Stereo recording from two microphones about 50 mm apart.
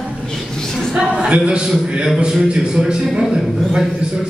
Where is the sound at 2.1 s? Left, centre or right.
Centre.